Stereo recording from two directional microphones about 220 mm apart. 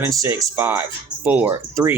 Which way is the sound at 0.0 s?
15° right (ahead or behind).